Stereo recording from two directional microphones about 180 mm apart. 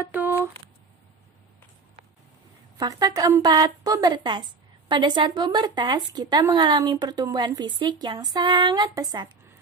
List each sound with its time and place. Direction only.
0.0 s speech: 10° right (ahead or behind)
2.8 s a woman's voice: 20° right (ahead or behind)